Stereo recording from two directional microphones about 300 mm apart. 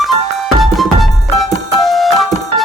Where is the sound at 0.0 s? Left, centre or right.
Centre.